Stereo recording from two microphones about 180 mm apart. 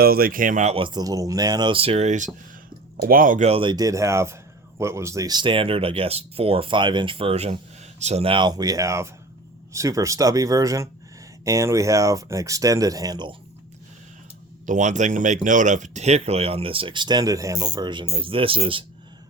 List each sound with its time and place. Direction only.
0.0 s speech: 55° right (ahead or behind)
3.0 s speech: 50° right (ahead or behind); by 13.3 s 25° right (ahead or behind)
14.7 s speech: 40° right (ahead or behind)